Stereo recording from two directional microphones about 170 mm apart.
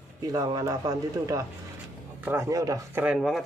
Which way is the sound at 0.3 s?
20° right (ahead or behind).